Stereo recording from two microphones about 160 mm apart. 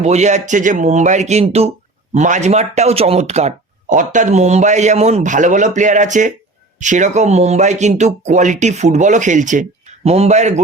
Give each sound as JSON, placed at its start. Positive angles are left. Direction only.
{"t": 0.0, "sound": "speech", "side_deg": -45}